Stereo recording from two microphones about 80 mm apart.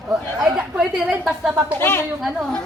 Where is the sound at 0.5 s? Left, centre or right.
Centre.